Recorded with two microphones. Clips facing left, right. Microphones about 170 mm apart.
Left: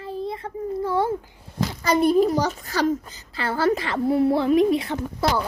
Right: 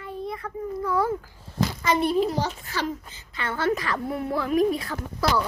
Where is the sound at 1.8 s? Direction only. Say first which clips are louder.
Left 5 dB; 40° left (ahead or behind).